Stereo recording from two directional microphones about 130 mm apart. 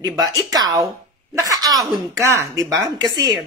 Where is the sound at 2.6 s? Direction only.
30° right (ahead or behind).